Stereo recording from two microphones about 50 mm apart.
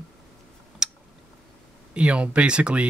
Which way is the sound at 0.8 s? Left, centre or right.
Centre.